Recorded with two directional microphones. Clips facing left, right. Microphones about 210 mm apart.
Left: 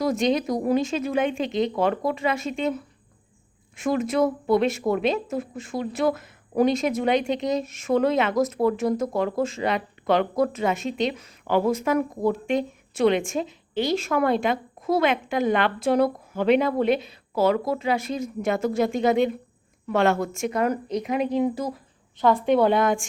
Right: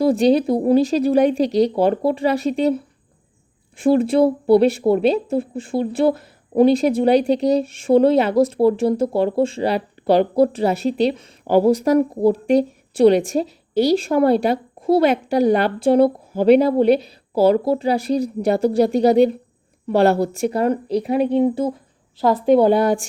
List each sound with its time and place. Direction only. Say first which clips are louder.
0.0 s speech: right 7 dB; 35° right (ahead or behind)